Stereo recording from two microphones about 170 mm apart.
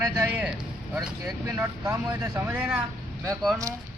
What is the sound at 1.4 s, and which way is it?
Speech, 15° right (ahead or behind).